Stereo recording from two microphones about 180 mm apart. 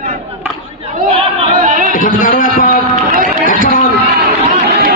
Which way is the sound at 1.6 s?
45° right (ahead or behind).